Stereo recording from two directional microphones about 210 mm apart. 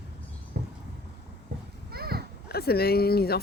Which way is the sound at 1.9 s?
50° right (ahead or behind).